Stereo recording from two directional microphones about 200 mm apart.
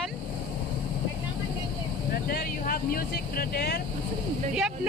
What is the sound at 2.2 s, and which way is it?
Speech, 50° left (ahead or behind).